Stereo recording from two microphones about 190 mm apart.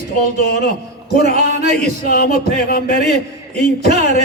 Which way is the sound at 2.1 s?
55° left (ahead or behind).